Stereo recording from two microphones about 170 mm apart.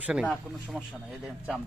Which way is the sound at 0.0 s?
5° right (ahead or behind).